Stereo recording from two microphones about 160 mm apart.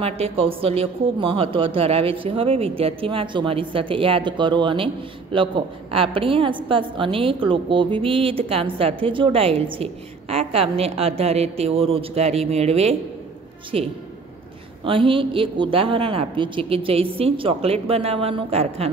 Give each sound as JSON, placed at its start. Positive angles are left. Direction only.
{"t": 0.0, "sound": "speech", "side_deg": -35}